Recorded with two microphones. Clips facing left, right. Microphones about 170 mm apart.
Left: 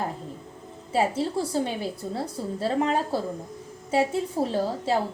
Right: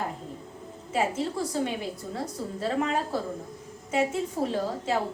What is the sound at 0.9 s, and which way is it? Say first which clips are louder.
A woman's voice: left 3 dB; 30° left (ahead or behind).